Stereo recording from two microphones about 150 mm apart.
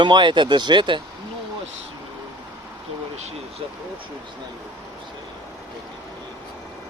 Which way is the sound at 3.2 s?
45° right (ahead or behind).